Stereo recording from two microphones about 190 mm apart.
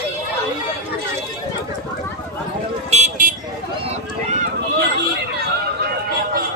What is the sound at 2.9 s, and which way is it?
Vehicle, 40° right (ahead or behind).